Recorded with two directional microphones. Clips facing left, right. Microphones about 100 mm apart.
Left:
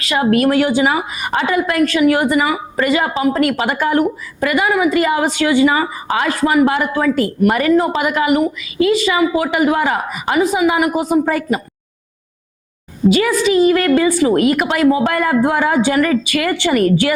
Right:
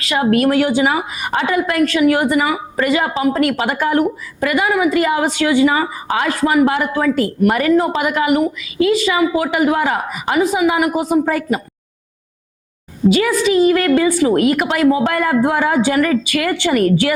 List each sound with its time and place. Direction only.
0.0 s a woman's voice: 25° left (ahead or behind)
13.1 s a woman's voice: 20° left (ahead or behind)